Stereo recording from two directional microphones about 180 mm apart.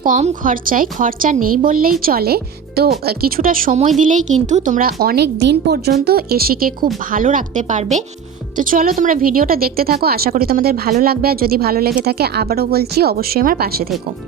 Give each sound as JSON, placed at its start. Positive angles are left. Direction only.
{"t": 0.0, "sound": "a woman's voice", "side_deg": -45}
{"t": 8.5, "sound": "speech", "side_deg": -50}